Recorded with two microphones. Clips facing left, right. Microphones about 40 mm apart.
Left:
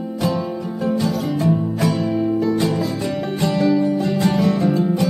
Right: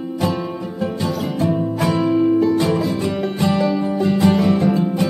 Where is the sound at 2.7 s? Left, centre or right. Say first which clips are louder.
Right 2 dB; right.